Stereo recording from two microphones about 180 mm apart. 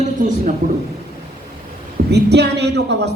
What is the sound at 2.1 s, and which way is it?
A woman's voice, 70° right (ahead or behind).